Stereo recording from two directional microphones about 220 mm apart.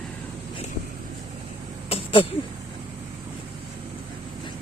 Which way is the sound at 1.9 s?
25° left (ahead or behind).